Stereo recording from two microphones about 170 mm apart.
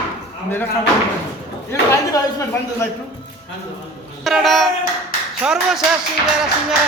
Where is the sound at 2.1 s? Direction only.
15° left (ahead or behind).